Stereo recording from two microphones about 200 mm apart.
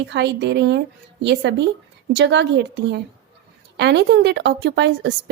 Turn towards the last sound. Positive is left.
turn(degrees=-60)  # may be behind; listen again after turning